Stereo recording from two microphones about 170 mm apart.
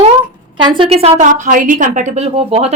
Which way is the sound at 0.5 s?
30° right (ahead or behind).